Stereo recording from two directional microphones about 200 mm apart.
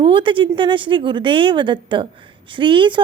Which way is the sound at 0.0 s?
25° right (ahead or behind).